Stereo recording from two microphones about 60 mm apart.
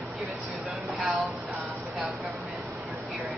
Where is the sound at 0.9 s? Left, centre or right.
Centre.